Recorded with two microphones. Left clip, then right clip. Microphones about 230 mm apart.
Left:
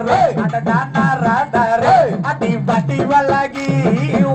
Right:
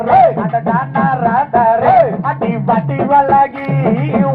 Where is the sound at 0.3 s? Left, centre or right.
Left.